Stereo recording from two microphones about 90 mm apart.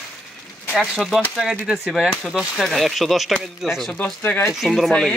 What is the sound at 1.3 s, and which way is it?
Speech, centre (ahead or behind).